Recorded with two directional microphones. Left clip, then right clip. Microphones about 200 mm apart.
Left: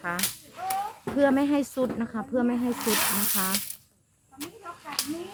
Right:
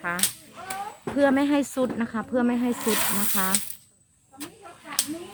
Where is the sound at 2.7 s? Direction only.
Centre (ahead or behind).